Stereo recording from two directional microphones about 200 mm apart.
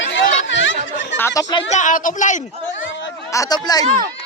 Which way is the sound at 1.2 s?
15° left (ahead or behind).